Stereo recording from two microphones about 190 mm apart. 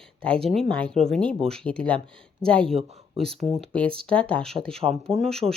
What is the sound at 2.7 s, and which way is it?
Speech, 30° right (ahead or behind).